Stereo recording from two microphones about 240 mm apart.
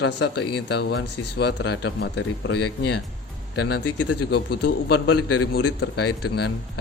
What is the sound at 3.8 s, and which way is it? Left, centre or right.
Speech, left.